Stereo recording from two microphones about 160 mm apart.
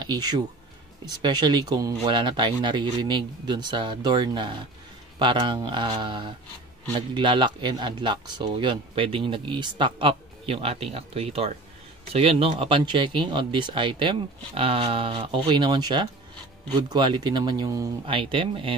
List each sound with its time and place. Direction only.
0.0 s speech: 25° right (ahead or behind)